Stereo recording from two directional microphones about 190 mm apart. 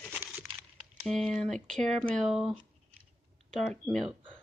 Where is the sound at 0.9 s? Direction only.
Centre (ahead or behind).